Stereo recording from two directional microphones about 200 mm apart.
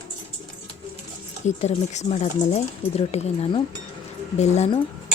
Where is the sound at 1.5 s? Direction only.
35° left (ahead or behind).